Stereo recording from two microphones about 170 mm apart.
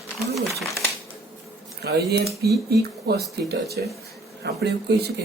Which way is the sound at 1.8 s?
70° right (ahead or behind).